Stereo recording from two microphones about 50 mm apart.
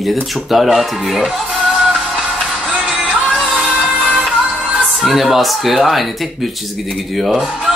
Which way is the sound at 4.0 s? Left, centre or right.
Centre.